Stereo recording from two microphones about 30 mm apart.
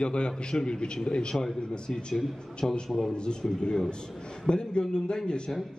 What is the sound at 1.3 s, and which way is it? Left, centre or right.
Speech, centre.